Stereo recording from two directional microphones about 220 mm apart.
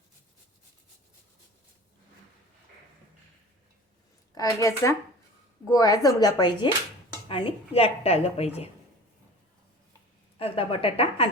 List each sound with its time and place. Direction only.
4.4 s a woman's voice: 15° left (ahead or behind)
10.3 s a woman's voice: 25° left (ahead or behind)